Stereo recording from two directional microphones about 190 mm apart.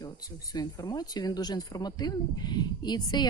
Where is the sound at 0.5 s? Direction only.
20° left (ahead or behind).